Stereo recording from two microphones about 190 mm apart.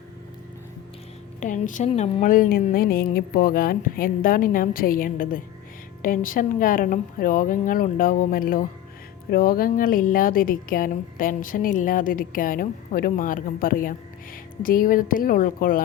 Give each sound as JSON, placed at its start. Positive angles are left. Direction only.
{"t": 1.4, "sound": "a woman's voice", "side_deg": 40}